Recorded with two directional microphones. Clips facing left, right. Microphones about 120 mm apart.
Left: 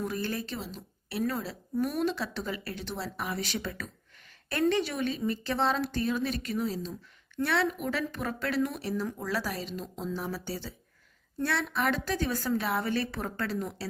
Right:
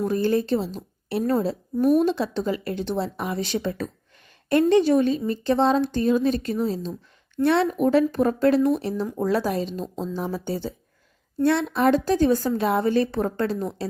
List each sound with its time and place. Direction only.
0.0 s speech: 35° right (ahead or behind)
1.8 s speech: 35° right (ahead or behind)
2.1 s speech: 25° right (ahead or behind)